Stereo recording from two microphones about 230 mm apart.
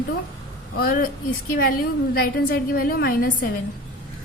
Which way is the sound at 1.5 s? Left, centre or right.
Left.